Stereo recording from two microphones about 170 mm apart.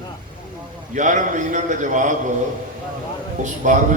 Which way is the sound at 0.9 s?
45° right (ahead or behind).